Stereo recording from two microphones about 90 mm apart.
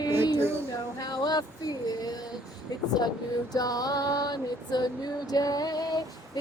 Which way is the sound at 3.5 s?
45° left (ahead or behind).